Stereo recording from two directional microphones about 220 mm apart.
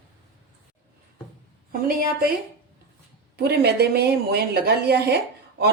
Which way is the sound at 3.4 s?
45° right (ahead or behind).